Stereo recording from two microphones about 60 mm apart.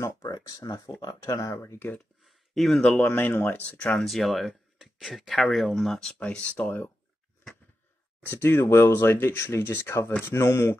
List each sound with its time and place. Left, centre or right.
0.0 s a sound: left
0.3 s speech: left
1.6 s speech: left
2.2 s a sound: centre
3.0 s speech: left
4.0 s speech: centre
6.1 s speech: left
8.3 s speech: left
8.6 s speech: left